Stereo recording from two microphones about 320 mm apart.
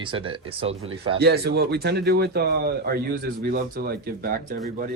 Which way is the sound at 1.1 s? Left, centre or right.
Right.